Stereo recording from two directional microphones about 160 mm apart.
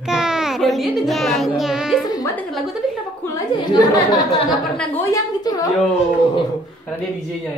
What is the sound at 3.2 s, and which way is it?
A woman's voice, 20° left (ahead or behind).